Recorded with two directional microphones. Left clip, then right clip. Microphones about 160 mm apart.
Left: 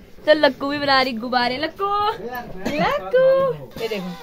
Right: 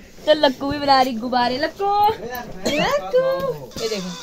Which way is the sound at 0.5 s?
40° left (ahead or behind).